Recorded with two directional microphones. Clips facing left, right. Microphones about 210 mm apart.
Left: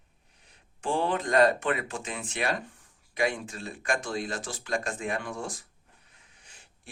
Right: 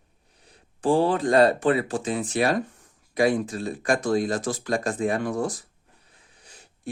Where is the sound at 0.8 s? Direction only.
35° right (ahead or behind).